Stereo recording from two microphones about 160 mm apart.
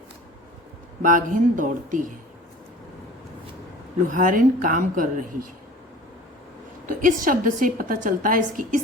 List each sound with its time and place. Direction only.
1.0 s a woman's voice: 55° right (ahead or behind)
4.1 s a woman's voice: 55° right (ahead or behind)
6.8 s a woman's voice: 60° right (ahead or behind)